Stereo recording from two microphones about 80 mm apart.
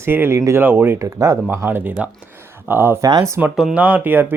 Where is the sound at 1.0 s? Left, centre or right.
Right.